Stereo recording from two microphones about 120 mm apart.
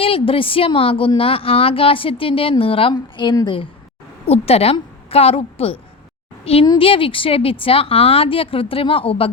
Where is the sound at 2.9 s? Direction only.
35° left (ahead or behind).